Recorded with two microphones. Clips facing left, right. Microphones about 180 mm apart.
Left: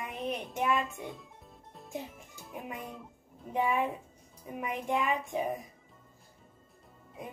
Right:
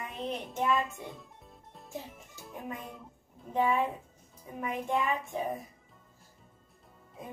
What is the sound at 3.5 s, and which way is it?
Child singing, 15° left (ahead or behind).